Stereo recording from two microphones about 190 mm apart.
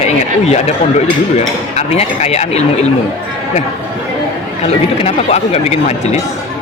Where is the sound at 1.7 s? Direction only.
35° left (ahead or behind).